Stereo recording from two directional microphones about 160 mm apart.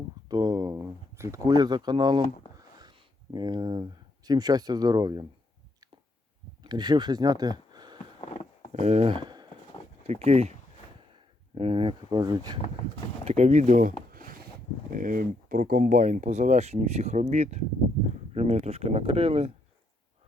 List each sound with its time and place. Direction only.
0.3 s a sound: 25° right (ahead or behind)
3.3 s speech: 25° right (ahead or behind)
6.6 s speech: 25° right (ahead or behind)
8.2 s wild animals: 45° left (ahead or behind)
8.7 s speech: 45° right (ahead or behind)
10.0 s speech: 40° right (ahead or behind)
11.5 s speech: 35° right (ahead or behind)
13.2 s speech: 45° right (ahead or behind)
14.1 s a sound: 65° right (ahead or behind)
14.9 s speech: 60° right (ahead or behind); by 19.5 s 35° right (ahead or behind)